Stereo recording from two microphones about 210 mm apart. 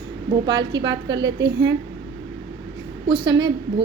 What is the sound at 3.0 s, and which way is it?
Speech, 20° right (ahead or behind).